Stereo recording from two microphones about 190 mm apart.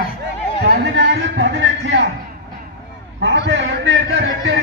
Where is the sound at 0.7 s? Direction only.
65° right (ahead or behind).